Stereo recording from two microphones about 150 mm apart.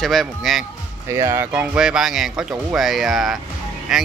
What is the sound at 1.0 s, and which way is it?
Speech, 20° right (ahead or behind).